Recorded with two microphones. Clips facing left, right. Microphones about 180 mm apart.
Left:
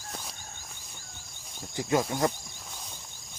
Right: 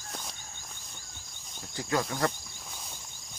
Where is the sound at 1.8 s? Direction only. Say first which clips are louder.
Left 3 dB; 20° left (ahead or behind).